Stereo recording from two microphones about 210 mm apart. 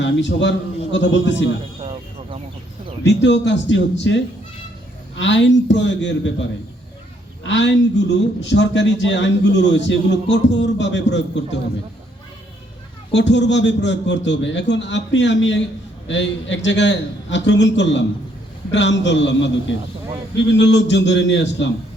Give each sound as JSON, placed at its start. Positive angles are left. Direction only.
{"t": 0.0, "sound": "a man's voice", "side_deg": 60}
{"t": 1.8, "sound": "a sound", "side_deg": -30}
{"t": 3.0, "sound": "a man's voice", "side_deg": 55}
{"t": 7.4, "sound": "a man's voice", "side_deg": 55}
{"t": 13.1, "sound": "a man's voice", "side_deg": 55}